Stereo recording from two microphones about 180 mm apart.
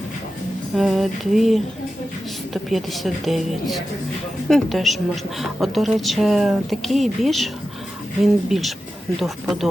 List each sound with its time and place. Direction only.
0.8 s speech: centre (ahead or behind)